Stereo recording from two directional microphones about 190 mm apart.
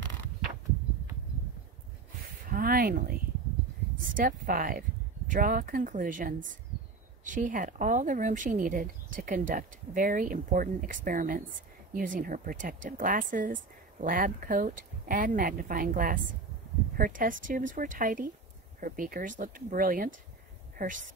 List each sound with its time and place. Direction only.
2.4 s speech: 50° right (ahead or behind)